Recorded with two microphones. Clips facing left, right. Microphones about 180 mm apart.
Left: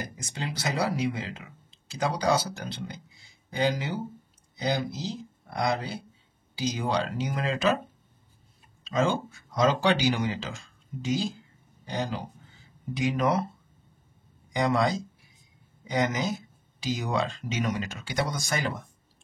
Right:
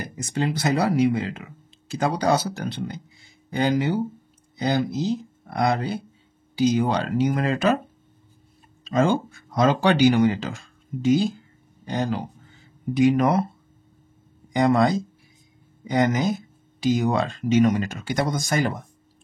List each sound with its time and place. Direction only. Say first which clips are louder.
0.0 s speech: right 9 dB; 55° right (ahead or behind)
8.8 s speech: right 5 dB; 55° right (ahead or behind)
14.5 s speech: right 6 dB; 50° right (ahead or behind)